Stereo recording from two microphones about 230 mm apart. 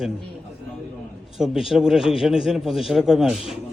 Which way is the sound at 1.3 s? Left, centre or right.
Centre.